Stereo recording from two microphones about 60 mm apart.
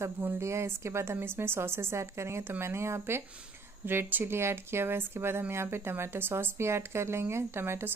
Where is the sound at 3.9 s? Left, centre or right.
Right.